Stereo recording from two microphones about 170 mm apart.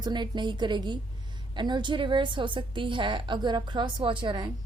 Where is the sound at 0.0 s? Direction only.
25° right (ahead or behind).